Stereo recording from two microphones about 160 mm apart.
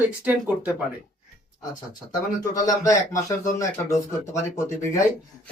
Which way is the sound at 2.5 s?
20° left (ahead or behind).